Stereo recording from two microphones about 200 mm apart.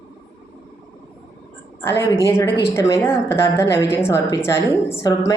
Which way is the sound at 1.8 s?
10° left (ahead or behind).